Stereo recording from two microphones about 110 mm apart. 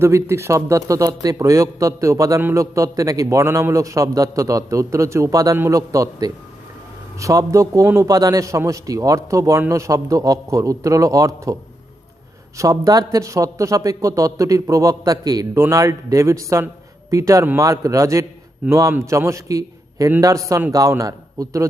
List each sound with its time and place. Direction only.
0.0 s a man's voice: 25° right (ahead or behind)
12.5 s a man's voice: 30° right (ahead or behind)